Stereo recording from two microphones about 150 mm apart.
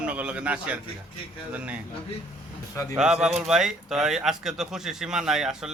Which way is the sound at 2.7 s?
20° left (ahead or behind).